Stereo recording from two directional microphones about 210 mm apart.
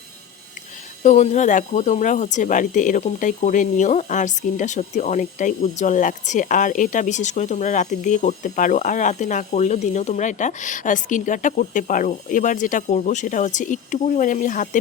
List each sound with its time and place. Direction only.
1.0 s speech: 35° left (ahead or behind)